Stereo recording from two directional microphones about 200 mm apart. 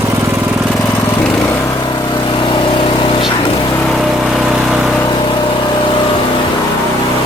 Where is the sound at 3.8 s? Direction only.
Centre (ahead or behind).